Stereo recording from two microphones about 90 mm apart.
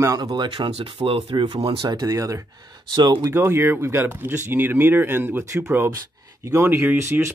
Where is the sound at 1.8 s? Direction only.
40° right (ahead or behind).